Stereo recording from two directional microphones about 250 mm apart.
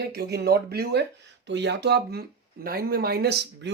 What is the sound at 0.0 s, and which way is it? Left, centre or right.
Speech, right.